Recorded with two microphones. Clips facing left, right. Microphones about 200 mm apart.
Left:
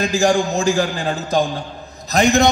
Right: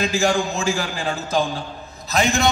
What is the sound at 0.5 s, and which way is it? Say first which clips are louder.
Speech: left 6 dB; 35° left (ahead or behind).